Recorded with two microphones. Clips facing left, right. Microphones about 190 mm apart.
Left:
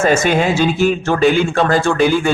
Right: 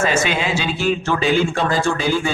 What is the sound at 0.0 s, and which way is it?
Speech, 45° left (ahead or behind).